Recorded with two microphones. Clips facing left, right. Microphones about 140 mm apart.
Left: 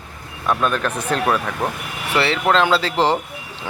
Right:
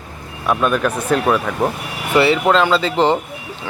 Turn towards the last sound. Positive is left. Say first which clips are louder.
# right 2 dB
turn(degrees=0)  # may be behind; listen again after turning